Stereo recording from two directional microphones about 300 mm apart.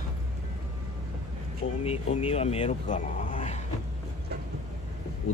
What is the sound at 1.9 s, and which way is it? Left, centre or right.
Speech, centre.